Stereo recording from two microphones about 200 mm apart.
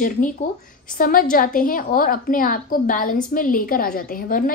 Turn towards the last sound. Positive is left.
turn(degrees=45)  # may be behind; listen again after turning